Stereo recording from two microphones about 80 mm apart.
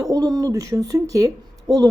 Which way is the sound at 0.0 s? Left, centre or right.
Right.